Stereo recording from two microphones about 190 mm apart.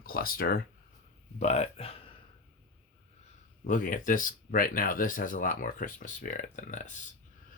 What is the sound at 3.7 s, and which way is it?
Speech, 45° left (ahead or behind).